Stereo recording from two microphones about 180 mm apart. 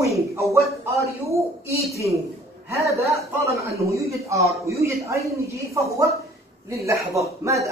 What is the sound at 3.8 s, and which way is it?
A man's voice, 15° right (ahead or behind).